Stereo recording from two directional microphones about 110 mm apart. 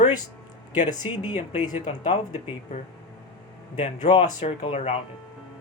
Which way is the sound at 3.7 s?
90° left.